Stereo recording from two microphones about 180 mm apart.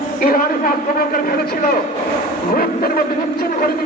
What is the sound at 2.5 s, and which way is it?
Speech, 55° left (ahead or behind).